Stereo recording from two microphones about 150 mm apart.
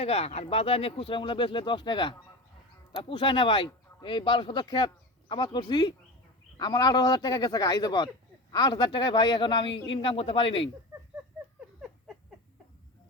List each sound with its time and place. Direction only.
0.0 s speech: 40° left (ahead or behind)